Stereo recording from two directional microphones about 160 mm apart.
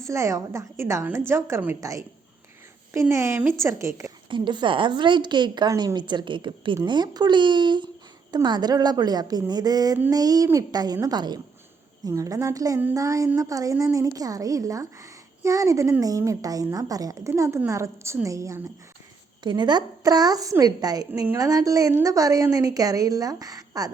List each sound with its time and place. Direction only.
0.0 s a woman's voice: 20° right (ahead or behind)
4.3 s a woman's voice: 30° right (ahead or behind)